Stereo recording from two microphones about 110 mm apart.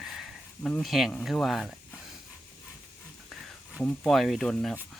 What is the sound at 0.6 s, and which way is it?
Speech, 10° left (ahead or behind).